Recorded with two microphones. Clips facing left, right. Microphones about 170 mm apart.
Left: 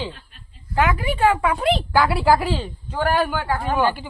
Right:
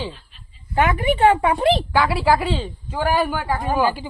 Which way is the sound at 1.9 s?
Centre (ahead or behind).